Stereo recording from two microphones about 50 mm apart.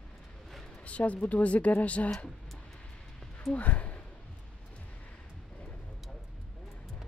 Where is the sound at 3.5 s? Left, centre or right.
Left.